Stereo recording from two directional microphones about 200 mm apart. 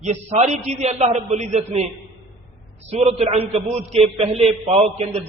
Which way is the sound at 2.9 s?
30° right (ahead or behind).